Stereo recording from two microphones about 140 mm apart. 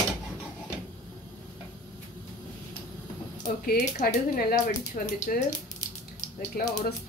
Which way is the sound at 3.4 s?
70° left (ahead or behind).